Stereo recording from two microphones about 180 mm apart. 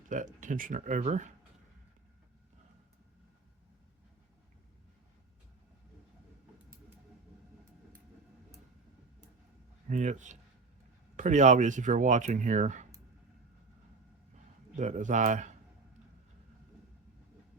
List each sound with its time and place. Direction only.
0.1 s speech: 45° right (ahead or behind)
9.9 s speech: 40° right (ahead or behind)
14.8 s speech: 45° right (ahead or behind)